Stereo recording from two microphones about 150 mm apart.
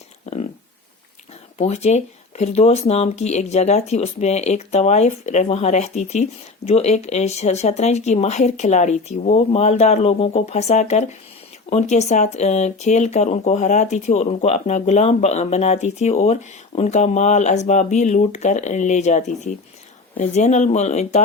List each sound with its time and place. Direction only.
1.5 s speech: 45° left (ahead or behind)